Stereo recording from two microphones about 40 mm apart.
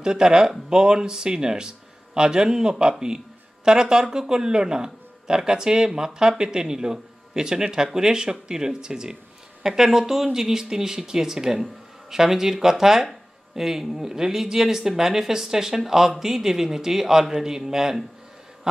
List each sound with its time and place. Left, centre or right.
0.0 s speech: centre